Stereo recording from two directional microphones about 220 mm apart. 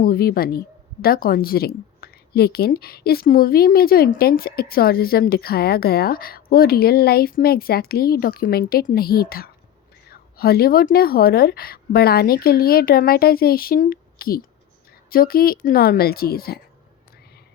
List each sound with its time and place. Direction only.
0.0 s a woman's voice: 45° left (ahead or behind)